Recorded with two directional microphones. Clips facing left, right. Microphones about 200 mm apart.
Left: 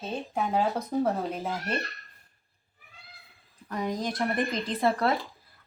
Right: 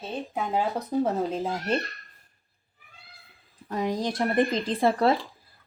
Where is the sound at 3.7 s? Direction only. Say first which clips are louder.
Right 3 dB; 25° right (ahead or behind).